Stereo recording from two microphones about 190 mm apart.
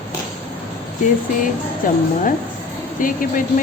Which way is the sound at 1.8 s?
45° left (ahead or behind).